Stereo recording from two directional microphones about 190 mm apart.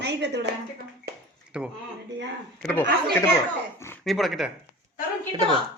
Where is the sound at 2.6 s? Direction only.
10° left (ahead or behind).